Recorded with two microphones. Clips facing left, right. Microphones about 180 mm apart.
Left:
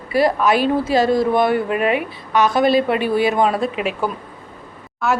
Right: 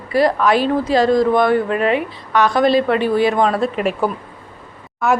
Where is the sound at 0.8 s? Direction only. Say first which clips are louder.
Right 2 dB; 5° left (ahead or behind).